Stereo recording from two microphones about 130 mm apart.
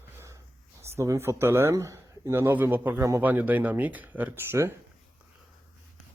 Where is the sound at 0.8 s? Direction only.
20° right (ahead or behind).